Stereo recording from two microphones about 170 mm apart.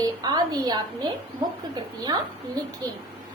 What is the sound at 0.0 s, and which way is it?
A woman's voice, 25° right (ahead or behind).